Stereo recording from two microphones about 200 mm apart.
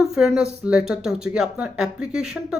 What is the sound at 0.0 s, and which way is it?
Speech, 5° right (ahead or behind).